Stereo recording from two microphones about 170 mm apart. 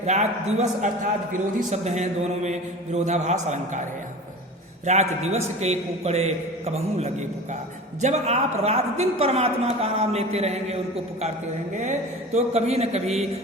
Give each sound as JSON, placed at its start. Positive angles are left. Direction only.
{"t": 0.0, "sound": "a man's voice", "side_deg": -40}
{"t": 4.9, "sound": "a man's voice", "side_deg": -40}